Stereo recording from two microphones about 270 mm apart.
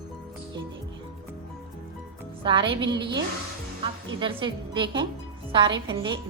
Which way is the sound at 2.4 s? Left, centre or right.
Centre.